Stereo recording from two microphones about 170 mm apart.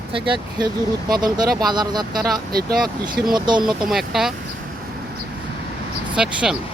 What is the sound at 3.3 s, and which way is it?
Speech, 25° right (ahead or behind).